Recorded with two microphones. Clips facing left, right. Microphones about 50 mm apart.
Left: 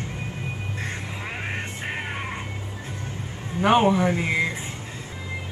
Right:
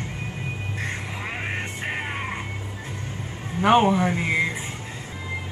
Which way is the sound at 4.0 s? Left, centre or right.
Centre.